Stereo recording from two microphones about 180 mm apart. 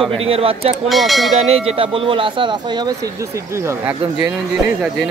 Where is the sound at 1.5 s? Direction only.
35° right (ahead or behind); by 4.0 s 15° right (ahead or behind).